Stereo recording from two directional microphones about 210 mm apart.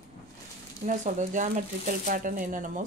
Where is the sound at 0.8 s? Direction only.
35° right (ahead or behind).